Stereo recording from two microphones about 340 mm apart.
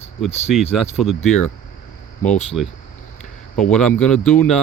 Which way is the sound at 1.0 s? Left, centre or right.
Centre.